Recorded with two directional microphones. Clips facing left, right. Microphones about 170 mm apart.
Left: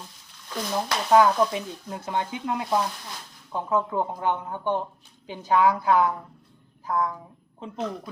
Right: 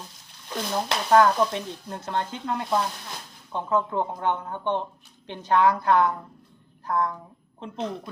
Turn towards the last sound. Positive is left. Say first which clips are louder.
# even
turn(degrees=5)  # may be behind; listen again after turning